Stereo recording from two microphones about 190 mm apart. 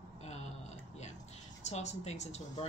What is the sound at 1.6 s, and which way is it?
Speech, 35° left (ahead or behind).